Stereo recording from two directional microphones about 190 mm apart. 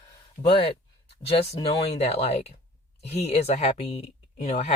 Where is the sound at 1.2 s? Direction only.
30° left (ahead or behind).